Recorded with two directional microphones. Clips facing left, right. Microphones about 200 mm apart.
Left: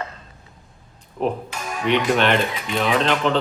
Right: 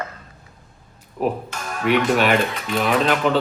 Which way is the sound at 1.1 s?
Centre (ahead or behind).